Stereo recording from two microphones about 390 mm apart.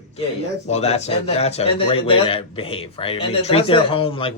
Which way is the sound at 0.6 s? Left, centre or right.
Centre.